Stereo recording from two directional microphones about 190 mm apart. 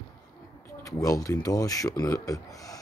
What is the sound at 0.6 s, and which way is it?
Speech, 20° left (ahead or behind).